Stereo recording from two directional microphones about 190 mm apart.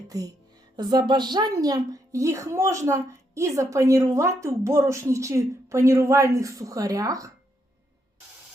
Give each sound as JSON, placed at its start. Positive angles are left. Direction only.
{"t": 0.8, "sound": "a woman's voice", "side_deg": -20}